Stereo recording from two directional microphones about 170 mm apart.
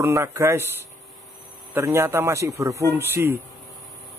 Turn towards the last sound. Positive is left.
turn(degrees=-15)  # may be behind; listen again after turning